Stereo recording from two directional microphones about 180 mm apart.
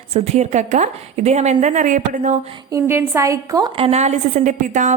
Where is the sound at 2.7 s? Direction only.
15° right (ahead or behind); by 4.9 s 45° right (ahead or behind).